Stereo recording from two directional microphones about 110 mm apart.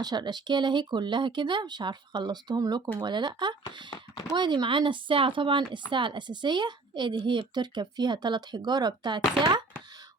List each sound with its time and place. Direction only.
0.0 s a woman's voice: 40° right (ahead or behind)